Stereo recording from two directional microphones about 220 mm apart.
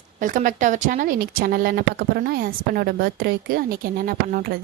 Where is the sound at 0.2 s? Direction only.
35° right (ahead or behind).